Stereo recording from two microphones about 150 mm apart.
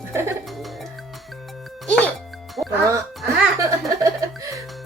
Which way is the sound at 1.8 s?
5° left (ahead or behind).